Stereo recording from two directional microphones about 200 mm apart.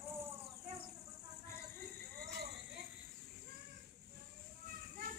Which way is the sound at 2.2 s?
55° right (ahead or behind).